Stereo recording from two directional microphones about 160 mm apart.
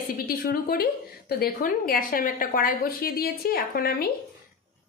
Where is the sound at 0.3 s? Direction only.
65° left (ahead or behind).